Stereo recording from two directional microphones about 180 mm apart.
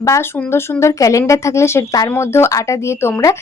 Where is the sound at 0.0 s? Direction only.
15° left (ahead or behind).